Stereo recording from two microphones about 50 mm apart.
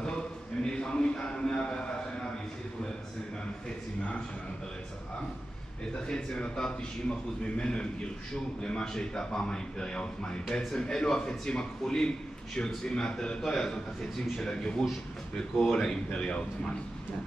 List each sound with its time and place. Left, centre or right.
0.7 s a sound: centre
6.0 s a man's voice: centre
15.5 s speech: centre
16.2 s a man's voice: centre